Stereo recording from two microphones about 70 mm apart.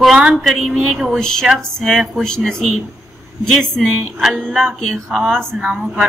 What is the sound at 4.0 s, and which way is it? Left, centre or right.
Speech, centre.